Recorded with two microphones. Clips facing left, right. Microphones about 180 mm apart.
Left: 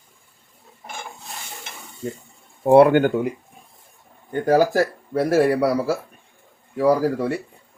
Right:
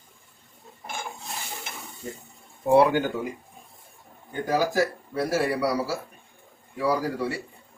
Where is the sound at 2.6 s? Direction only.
55° left (ahead or behind).